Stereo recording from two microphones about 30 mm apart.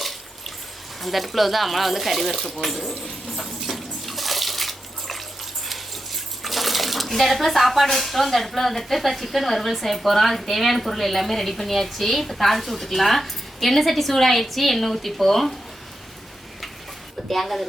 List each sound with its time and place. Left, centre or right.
1.0 s a woman's voice: centre
2.3 s a sound: centre
5.6 s bathtub: centre
7.9 s a woman's voice: centre
17.2 s a woman's voice: centre